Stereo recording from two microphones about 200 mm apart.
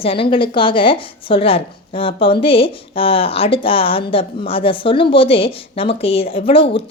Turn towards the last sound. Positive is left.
turn(degrees=25)  # may be behind; listen again after turning